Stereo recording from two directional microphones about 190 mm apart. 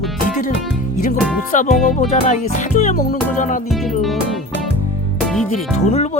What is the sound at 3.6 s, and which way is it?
Music, centre (ahead or behind).